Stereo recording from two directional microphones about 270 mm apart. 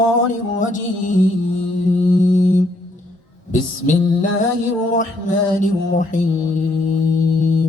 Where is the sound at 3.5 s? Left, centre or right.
Left.